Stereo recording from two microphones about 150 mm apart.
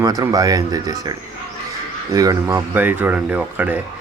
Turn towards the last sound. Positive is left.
turn(degrees=-10)  # may be behind; listen again after turning